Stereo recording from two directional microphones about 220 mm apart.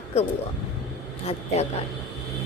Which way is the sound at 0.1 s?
30° left (ahead or behind).